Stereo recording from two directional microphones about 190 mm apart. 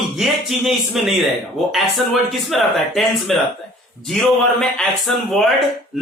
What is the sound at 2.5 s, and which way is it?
Speech, centre (ahead or behind).